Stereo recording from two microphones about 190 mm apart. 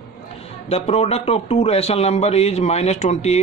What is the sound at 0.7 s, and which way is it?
Speech, 35° left (ahead or behind).